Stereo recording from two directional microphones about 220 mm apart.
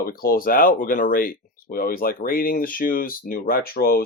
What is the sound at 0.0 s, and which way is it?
Speech, 40° left (ahead or behind).